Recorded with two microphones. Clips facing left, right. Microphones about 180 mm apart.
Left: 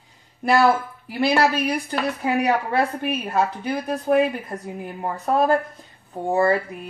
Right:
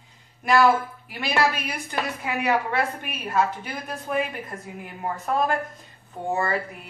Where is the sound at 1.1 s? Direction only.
35° left (ahead or behind).